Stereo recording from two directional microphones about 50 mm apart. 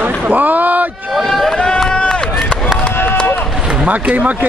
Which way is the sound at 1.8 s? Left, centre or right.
Centre.